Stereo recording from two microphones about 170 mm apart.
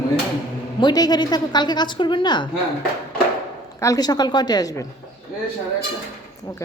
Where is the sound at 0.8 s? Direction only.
25° left (ahead or behind).